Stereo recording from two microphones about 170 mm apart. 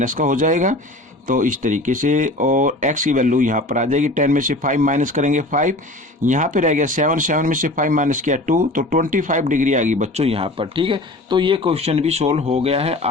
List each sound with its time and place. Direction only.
0.0 s speech: 50° right (ahead or behind)